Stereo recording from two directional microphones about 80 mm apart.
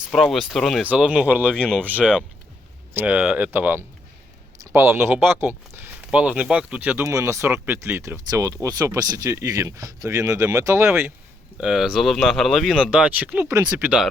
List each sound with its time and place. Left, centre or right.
0.1 s speech: centre
0.8 s speech: centre
1.5 s speech: centre
1.8 s speech: right
6.1 s speech: centre
7.0 s speech: right
8.3 s speech: right
11.6 s speech: centre
12.9 s speech: centre
13.5 s speech: right